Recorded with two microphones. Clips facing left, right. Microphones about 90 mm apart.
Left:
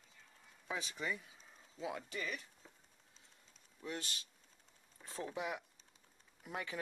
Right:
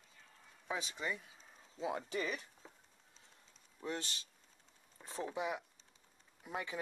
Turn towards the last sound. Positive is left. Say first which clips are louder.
# right 1 dB
turn(degrees=-15)  # may be behind; listen again after turning